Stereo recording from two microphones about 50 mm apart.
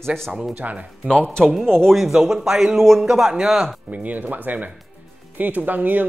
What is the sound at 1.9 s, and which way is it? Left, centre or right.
Speech, centre.